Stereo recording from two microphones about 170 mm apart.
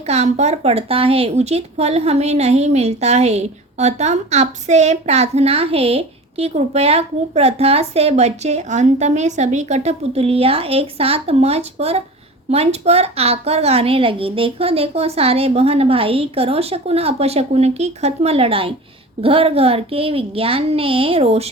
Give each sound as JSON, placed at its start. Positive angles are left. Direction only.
{"t": 0.1, "sound": "speech", "side_deg": -40}